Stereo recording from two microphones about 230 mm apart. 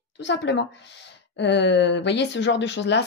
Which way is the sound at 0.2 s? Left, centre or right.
Left.